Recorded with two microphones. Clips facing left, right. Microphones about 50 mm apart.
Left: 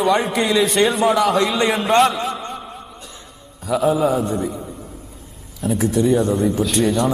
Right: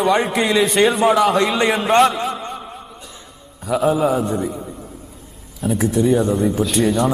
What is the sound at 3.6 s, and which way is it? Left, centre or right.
Speech, centre.